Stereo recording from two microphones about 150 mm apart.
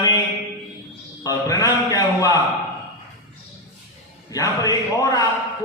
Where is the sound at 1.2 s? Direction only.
25° left (ahead or behind).